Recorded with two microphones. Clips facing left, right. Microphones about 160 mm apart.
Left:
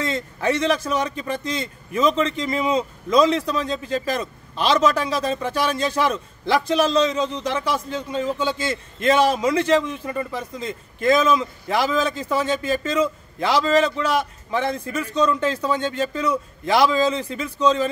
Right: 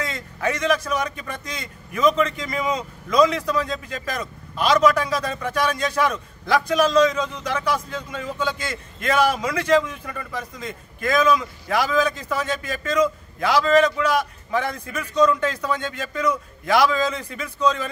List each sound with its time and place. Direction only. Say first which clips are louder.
0.0 s speech: left 3 dB; 30° left (ahead or behind)